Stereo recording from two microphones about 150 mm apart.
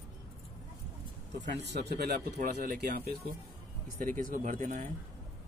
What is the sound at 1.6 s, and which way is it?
Speech, 90° right.